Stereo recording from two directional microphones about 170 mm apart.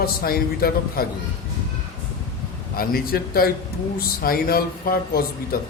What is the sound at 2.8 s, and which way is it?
A man's voice, 60° left (ahead or behind).